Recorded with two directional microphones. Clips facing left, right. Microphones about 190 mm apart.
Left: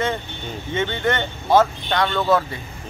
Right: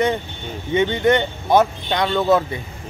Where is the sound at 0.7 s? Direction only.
15° right (ahead or behind).